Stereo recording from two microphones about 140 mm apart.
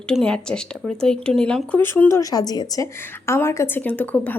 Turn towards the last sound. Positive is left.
turn(degrees=10)  # may be behind; listen again after turning